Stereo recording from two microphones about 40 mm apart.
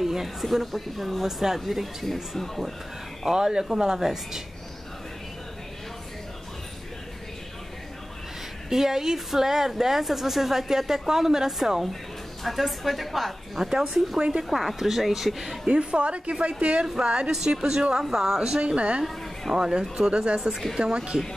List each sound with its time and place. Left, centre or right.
0.0 s speech: centre
3.3 s speech: centre
8.6 s speech: centre
15.6 s a woman's voice: right
18.6 s a woman's voice: right